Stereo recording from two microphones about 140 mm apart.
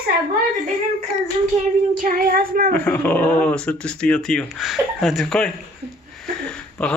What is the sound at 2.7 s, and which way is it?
Speech, 10° left (ahead or behind).